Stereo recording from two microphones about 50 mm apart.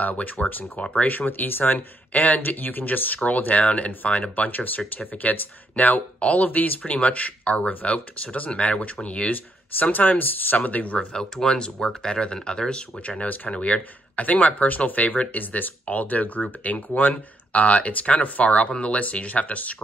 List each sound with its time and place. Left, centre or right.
0.0 s speech: left
9.8 s speech: left
11.1 s speech: centre
13.2 s speech: left